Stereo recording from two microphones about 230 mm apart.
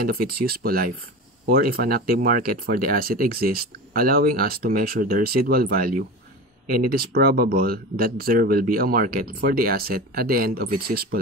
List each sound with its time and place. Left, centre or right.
0.0 s speech: right